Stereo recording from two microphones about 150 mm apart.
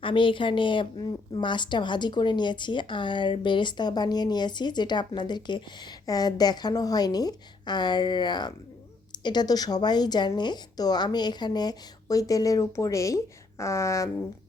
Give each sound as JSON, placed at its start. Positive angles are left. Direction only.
{"t": 0.0, "sound": "a woman's voice", "side_deg": 35}